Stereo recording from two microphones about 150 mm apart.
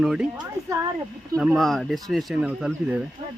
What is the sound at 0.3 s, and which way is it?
Speech, 20° right (ahead or behind).